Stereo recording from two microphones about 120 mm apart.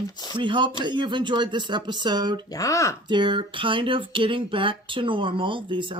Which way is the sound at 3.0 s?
40° right (ahead or behind).